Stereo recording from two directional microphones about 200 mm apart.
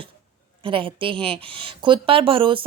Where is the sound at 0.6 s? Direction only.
25° right (ahead or behind).